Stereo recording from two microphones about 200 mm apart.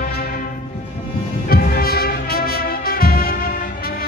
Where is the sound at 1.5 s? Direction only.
50° left (ahead or behind).